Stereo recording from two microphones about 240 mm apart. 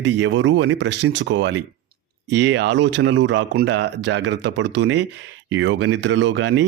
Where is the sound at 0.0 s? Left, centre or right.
Right.